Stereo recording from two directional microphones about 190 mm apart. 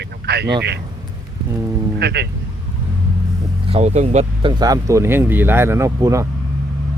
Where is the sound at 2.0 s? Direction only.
60° right (ahead or behind).